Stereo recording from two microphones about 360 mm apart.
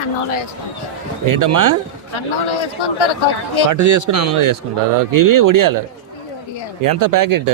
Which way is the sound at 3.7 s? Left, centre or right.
Right.